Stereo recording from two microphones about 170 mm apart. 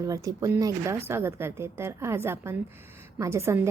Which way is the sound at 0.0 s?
20° right (ahead or behind).